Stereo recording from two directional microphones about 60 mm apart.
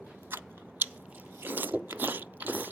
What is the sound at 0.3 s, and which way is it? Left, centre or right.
Chewing, right.